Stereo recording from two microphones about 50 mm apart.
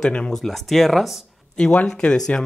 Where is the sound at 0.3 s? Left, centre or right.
Centre.